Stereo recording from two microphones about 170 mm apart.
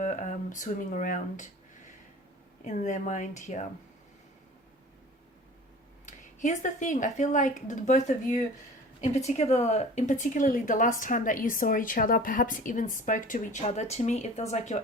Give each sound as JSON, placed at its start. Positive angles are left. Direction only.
{"t": 0.0, "sound": "speech", "side_deg": 50}
{"t": 2.6, "sound": "a woman's voice", "side_deg": 45}
{"t": 6.1, "sound": "a woman's voice", "side_deg": 45}